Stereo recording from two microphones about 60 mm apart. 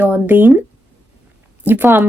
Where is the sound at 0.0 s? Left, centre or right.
Right.